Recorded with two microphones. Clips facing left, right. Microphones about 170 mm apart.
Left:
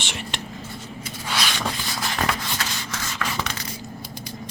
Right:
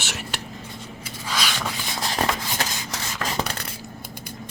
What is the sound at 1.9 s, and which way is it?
Shuffle, 30° right (ahead or behind).